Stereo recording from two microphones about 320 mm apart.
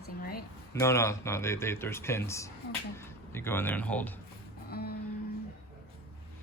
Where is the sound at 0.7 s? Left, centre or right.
Centre.